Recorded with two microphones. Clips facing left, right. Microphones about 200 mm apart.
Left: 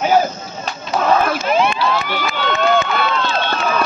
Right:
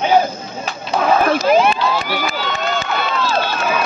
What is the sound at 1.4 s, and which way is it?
Speech, 40° right (ahead or behind).